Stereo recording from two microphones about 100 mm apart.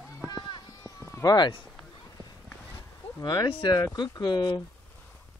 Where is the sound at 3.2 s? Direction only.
40° left (ahead or behind).